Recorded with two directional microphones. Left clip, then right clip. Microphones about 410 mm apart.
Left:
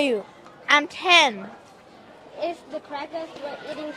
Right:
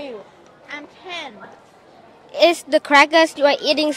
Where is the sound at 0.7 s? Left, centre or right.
Left.